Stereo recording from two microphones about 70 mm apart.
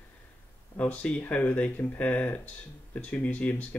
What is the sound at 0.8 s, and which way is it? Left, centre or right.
Speech, centre.